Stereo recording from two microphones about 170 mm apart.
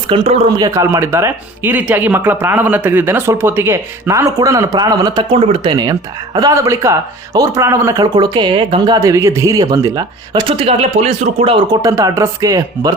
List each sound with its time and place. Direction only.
0.1 s speech: 35° right (ahead or behind)
0.5 s speech: 20° right (ahead or behind)
11.8 s speech: 20° right (ahead or behind)